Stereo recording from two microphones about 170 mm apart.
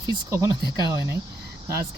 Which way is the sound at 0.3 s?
15° right (ahead or behind).